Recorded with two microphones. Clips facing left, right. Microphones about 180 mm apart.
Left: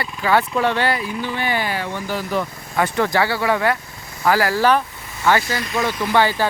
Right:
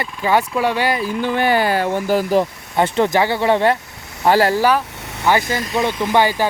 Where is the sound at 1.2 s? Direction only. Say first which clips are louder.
Right 6 dB; 50° right (ahead or behind).